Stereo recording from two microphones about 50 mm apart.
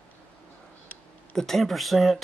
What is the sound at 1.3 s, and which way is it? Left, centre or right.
Speech, centre.